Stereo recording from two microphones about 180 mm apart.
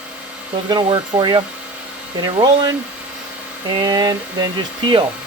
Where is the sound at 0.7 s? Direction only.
25° right (ahead or behind).